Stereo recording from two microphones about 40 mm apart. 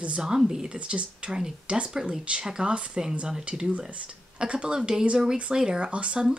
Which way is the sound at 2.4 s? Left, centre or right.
Centre.